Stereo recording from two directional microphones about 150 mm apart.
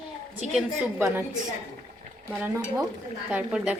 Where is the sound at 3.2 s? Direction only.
5° right (ahead or behind).